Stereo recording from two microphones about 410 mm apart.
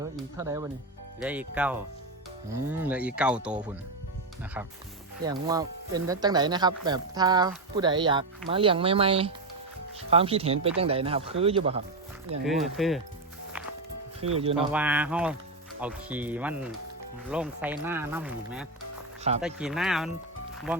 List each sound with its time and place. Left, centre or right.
0.0 s speech: centre
5.2 s speech: centre
12.4 s speech: centre
13.5 s music: centre
14.3 s speech: centre